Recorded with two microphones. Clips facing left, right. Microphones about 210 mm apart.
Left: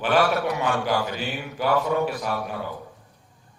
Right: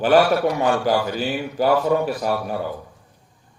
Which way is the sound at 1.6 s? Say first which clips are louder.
Right 4 dB; 40° right (ahead or behind).